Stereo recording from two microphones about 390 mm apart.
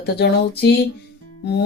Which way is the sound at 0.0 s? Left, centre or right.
Left.